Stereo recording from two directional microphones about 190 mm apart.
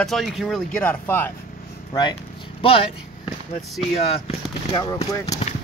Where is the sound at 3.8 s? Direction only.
30° left (ahead or behind).